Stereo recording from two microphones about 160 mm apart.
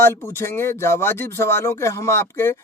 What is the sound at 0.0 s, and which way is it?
Speech, 15° left (ahead or behind).